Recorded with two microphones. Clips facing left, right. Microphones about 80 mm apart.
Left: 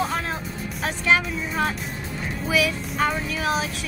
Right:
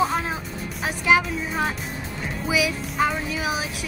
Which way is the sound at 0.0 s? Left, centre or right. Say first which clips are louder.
Right 3 dB; centre.